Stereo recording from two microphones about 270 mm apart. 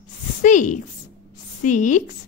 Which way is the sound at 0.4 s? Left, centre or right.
Left.